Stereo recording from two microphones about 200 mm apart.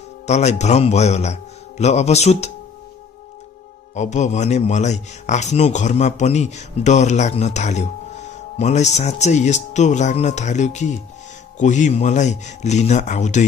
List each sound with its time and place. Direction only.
0.3 s speech: 35° left (ahead or behind)
3.9 s speech: 35° left (ahead or behind)